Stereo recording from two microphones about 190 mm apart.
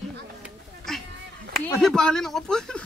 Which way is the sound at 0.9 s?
Centre (ahead or behind).